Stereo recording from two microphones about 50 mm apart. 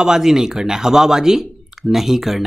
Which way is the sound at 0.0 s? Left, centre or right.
Centre.